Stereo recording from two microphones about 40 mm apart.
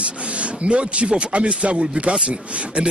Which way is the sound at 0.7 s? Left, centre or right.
Right.